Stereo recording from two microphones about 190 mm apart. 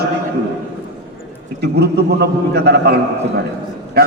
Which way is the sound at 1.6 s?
60° right (ahead or behind).